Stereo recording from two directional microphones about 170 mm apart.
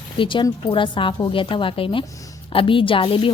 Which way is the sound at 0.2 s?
30° left (ahead or behind).